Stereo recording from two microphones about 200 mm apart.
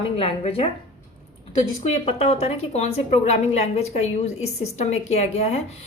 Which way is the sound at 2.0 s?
30° left (ahead or behind).